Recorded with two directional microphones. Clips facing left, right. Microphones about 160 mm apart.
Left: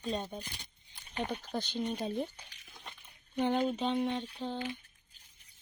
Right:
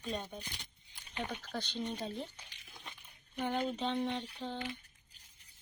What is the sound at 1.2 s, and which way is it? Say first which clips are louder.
Speech: left 4 dB; 15° left (ahead or behind).